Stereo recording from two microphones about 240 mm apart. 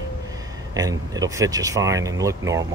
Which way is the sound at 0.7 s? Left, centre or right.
Centre.